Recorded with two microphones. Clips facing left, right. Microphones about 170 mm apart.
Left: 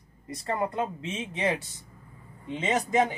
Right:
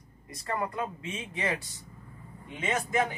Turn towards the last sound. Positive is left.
turn(degrees=20)  # may be behind; listen again after turning